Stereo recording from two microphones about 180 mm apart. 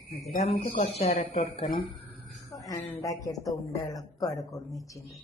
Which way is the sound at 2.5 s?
20° left (ahead or behind).